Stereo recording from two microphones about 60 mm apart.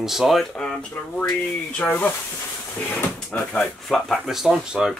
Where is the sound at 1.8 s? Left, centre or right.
Left.